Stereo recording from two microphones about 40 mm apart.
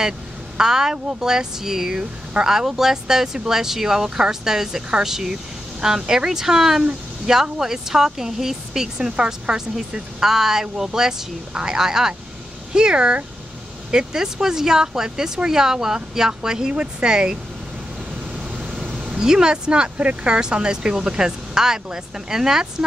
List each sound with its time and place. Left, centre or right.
0.6 s speech: centre
9.8 s speech: centre
18.9 s speech: centre